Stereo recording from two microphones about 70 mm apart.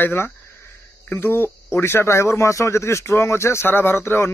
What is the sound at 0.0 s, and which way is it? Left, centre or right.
Speech, left.